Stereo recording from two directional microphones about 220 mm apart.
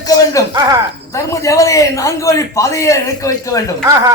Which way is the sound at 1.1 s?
15° left (ahead or behind).